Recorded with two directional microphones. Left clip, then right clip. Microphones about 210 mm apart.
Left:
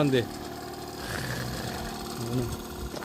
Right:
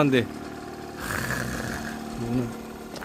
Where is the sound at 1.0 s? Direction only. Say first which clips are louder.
Right 6 dB; 20° right (ahead or behind).